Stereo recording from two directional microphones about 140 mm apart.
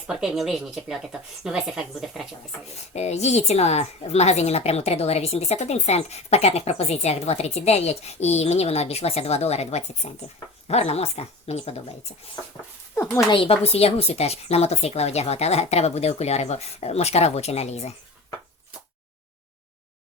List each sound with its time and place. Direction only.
0.1 s speech: 5° right (ahead or behind)
2.9 s a woman's voice: 50° left (ahead or behind)
13.3 s a woman's voice: 45° left (ahead or behind)